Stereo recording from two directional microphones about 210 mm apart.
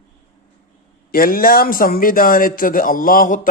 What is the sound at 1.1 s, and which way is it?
A man's voice, 45° left (ahead or behind).